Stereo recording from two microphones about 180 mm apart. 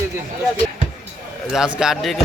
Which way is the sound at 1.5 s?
5° right (ahead or behind).